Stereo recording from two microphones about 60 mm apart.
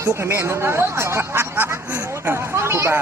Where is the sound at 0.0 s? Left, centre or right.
Right.